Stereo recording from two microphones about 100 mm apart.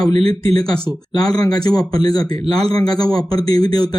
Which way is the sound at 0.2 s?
80° right.